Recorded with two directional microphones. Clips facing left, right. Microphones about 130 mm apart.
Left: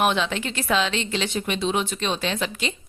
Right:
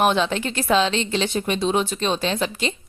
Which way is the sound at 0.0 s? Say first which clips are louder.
Right 3 dB; 35° right (ahead or behind).